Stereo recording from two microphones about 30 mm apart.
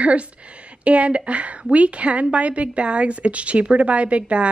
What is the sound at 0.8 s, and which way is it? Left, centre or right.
Speech, right.